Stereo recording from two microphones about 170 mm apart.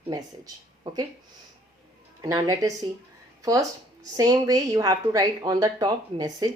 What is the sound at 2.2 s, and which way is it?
Speech, 20° right (ahead or behind).